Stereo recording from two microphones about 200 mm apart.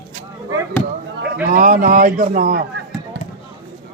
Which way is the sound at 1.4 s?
40° right (ahead or behind).